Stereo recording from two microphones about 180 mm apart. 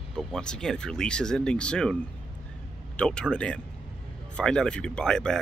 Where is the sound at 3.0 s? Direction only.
5° left (ahead or behind).